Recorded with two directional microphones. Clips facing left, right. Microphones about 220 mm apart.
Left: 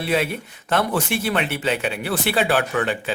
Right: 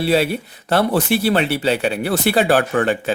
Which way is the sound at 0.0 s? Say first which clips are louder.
Right 5 dB; 35° right (ahead or behind).